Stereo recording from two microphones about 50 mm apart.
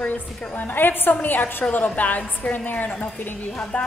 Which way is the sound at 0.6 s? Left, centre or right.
Left.